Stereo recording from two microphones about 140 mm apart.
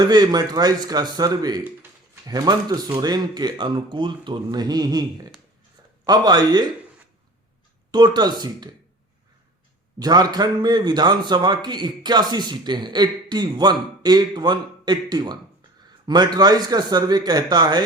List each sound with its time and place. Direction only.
0.0 s speech: 30° right (ahead or behind)
7.9 s speech: 30° right (ahead or behind)
10.0 s a man's voice: 30° right (ahead or behind)